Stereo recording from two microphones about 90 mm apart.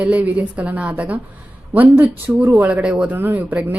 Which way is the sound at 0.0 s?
15° right (ahead or behind).